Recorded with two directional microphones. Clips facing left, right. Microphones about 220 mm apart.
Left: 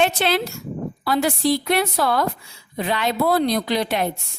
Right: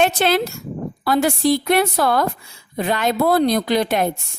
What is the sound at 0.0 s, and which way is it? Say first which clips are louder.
A woman's voice: right 3 dB; 45° right (ahead or behind).